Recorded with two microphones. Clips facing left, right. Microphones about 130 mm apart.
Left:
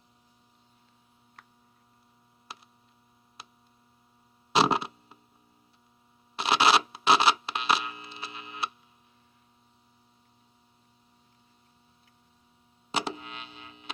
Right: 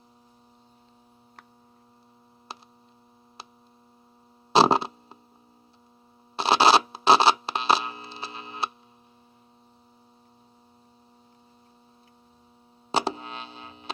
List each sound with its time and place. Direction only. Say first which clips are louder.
2.5 s hum: right 5 dB; 30° right (ahead or behind)
6.3 s mains hum: right 4 dB; 30° right (ahead or behind)
12.9 s music: right 6 dB; 30° right (ahead or behind)